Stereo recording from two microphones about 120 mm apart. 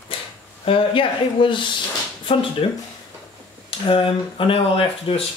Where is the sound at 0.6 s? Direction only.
45° left (ahead or behind).